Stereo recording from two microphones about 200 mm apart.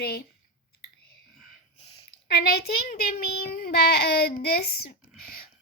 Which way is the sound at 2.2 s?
50° left (ahead or behind).